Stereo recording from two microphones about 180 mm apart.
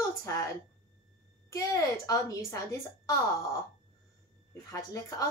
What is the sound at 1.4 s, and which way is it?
A woman's voice, 20° left (ahead or behind).